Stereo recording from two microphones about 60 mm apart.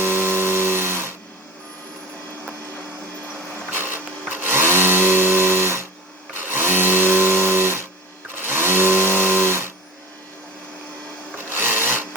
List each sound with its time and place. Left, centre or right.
0.0 s electric toothbrush: right
3.7 s a sound: right
6.3 s blender: right
8.4 s tools: right
11.4 s sewing machine: right